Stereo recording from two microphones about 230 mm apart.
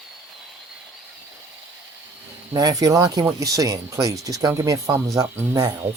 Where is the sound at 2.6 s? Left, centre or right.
Centre.